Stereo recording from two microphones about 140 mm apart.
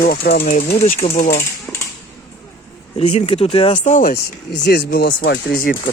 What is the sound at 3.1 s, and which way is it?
Speech, 45° left (ahead or behind).